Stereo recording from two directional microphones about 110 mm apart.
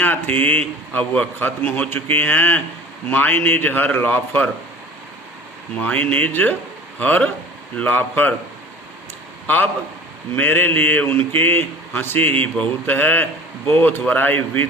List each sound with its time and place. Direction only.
0.0 s a man's voice: 15° left (ahead or behind)
5.7 s a man's voice: 15° left (ahead or behind)
10.3 s a man's voice: 15° left (ahead or behind)